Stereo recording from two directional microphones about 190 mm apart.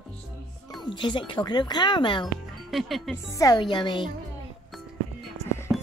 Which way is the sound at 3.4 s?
20° left (ahead or behind).